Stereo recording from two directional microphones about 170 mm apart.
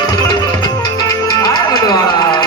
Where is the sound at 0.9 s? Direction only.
20° left (ahead or behind).